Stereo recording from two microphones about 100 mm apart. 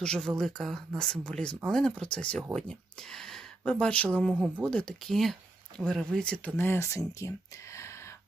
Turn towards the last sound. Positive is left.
turn(degrees=30)  # may be behind; listen again after turning